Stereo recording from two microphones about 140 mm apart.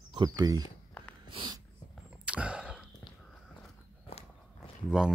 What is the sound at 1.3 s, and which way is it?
Snort, 35° right (ahead or behind).